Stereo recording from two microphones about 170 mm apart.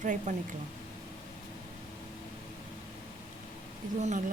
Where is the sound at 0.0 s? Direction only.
50° right (ahead or behind).